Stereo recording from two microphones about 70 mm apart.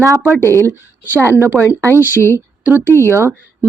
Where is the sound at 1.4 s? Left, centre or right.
Right.